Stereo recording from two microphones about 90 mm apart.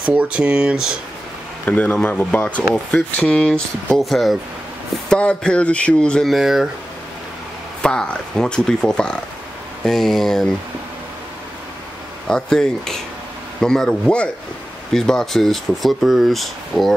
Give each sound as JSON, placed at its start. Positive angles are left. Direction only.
{"t": 0.0, "sound": "speech", "side_deg": -15}
{"t": 1.7, "sound": "speech", "side_deg": 15}
{"t": 6.3, "sound": "speech", "side_deg": -5}
{"t": 7.8, "sound": "speech", "side_deg": 10}
{"t": 12.3, "sound": "speech", "side_deg": 5}